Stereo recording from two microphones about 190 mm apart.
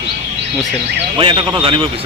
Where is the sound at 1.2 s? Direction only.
25° right (ahead or behind).